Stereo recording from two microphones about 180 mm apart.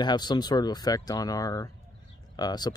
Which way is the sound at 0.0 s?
25° left (ahead or behind).